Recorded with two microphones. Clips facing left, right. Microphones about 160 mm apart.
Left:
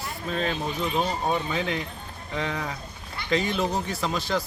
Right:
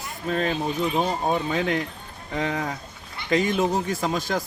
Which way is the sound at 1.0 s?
45° right (ahead or behind).